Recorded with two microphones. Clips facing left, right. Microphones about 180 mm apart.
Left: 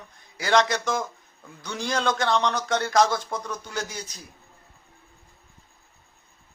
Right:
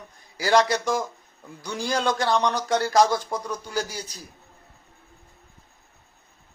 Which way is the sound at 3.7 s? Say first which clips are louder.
Right 3 dB; 35° right (ahead or behind).